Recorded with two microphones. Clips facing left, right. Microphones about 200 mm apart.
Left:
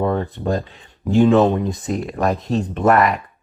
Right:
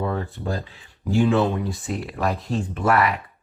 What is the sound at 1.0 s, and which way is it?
Speech, 60° left (ahead or behind).